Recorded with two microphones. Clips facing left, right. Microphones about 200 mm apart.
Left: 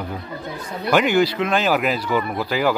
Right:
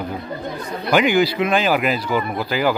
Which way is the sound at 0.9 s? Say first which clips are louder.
Right 1 dB; 5° right (ahead or behind).